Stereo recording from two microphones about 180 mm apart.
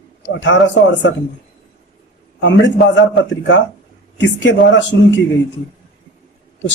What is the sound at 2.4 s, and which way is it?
A man's voice, 80° left.